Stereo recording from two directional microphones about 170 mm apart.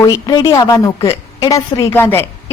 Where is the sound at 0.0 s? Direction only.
20° left (ahead or behind).